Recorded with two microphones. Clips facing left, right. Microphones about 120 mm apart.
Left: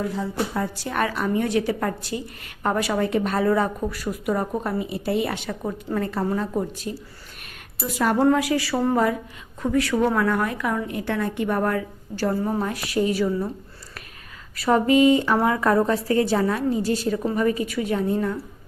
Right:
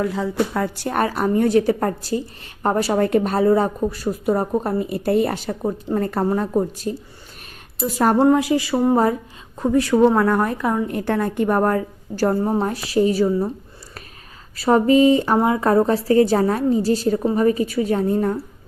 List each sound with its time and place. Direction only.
0.0 s a woman's voice: 85° right
0.9 s a woman's voice: 40° right (ahead or behind)
3.0 s a woman's voice: 45° right (ahead or behind)
8.2 s speech: 25° right (ahead or behind)
9.6 s a woman's voice: 30° right (ahead or behind)
10.8 s a woman's voice: 45° right (ahead or behind)
14.5 s a woman's voice: 30° right (ahead or behind)
15.4 s a woman's voice: 25° right (ahead or behind); by 18.3 s 40° right (ahead or behind)